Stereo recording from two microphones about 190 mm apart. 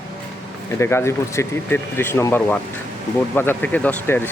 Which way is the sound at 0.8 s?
15° left (ahead or behind).